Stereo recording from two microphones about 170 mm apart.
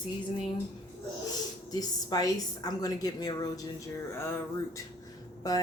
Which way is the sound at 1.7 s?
20° left (ahead or behind).